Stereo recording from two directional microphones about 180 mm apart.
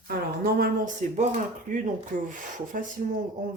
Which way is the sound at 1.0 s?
45° right (ahead or behind).